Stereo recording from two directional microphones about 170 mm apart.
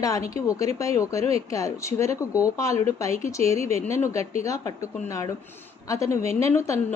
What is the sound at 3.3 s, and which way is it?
Speech, 20° left (ahead or behind).